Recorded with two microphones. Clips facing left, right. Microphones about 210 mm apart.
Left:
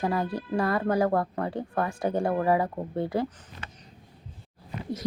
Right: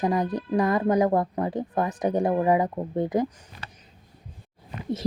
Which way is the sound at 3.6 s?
35° right (ahead or behind).